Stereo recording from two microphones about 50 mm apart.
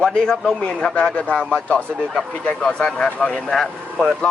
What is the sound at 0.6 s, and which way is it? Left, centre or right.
Speech, left.